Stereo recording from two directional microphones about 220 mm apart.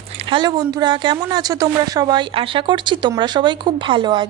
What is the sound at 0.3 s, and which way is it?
Speech, 20° right (ahead or behind).